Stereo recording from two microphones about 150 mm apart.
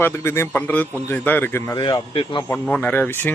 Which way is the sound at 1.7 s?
30° left (ahead or behind).